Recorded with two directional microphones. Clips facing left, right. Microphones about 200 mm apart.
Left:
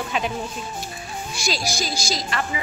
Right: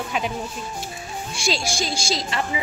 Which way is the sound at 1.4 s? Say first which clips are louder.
Right 1 dB; 25° right (ahead or behind).